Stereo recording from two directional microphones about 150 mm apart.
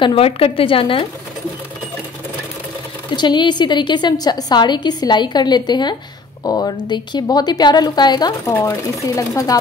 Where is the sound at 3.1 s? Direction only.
30° left (ahead or behind).